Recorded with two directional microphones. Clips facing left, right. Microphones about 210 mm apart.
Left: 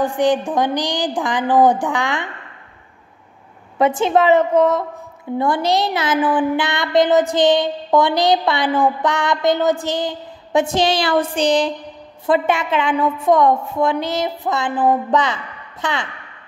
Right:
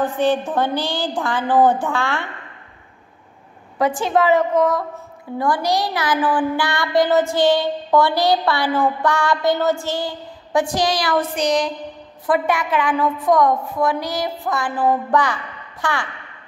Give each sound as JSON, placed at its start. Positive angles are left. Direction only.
{"t": 0.0, "sound": "a woman's voice", "side_deg": 15}
{"t": 3.7, "sound": "a woman's voice", "side_deg": 25}